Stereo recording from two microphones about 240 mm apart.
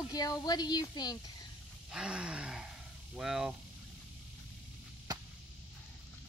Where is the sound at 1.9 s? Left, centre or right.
Centre.